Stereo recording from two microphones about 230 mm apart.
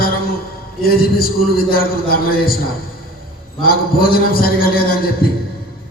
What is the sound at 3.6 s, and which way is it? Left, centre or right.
A man's voice, left.